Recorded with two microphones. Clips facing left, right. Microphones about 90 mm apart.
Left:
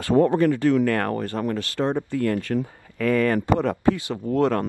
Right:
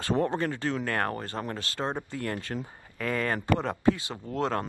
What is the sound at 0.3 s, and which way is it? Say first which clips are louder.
Speech: left 10 dB; 25° right (ahead or behind).